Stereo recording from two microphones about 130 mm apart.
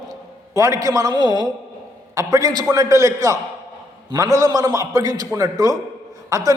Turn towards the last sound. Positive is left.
turn(degrees=-25)  # may be behind; listen again after turning